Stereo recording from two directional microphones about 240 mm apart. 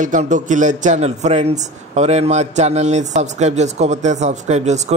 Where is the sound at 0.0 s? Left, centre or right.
Right.